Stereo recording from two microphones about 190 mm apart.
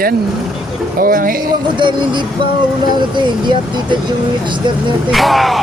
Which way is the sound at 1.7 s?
25° right (ahead or behind).